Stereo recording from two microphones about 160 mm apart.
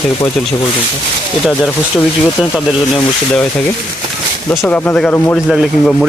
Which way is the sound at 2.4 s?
5° left (ahead or behind).